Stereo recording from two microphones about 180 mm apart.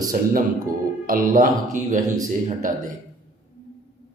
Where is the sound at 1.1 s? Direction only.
50° right (ahead or behind).